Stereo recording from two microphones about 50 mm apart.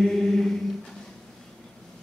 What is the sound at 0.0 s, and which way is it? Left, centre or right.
Mantra, centre.